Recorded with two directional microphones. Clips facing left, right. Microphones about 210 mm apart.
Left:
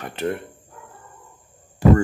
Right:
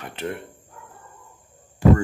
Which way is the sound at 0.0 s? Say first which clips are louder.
Left 4 dB; 45° left (ahead or behind).